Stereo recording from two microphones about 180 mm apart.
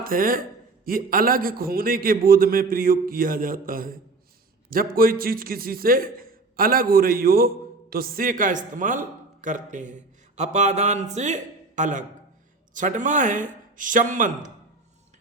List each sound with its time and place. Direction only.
0.0 s a man's voice: 50° right (ahead or behind)